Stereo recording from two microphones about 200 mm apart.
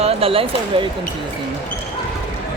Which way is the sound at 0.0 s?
30° right (ahead or behind).